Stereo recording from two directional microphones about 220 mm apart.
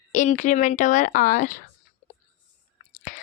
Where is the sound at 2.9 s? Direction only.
35° left (ahead or behind).